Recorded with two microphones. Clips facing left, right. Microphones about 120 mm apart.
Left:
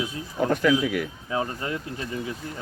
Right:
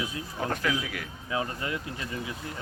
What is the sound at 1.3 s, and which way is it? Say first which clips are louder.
Speech: even; 35° left (ahead or behind).